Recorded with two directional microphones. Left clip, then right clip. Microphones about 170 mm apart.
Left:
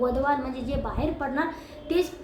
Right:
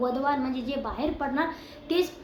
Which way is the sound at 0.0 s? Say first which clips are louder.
Left 2 dB; 15° right (ahead or behind).